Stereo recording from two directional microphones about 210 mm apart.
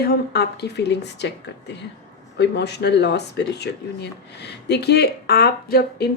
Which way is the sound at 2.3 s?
55° left (ahead or behind).